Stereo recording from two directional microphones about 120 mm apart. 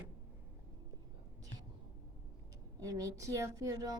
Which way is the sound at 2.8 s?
30° right (ahead or behind).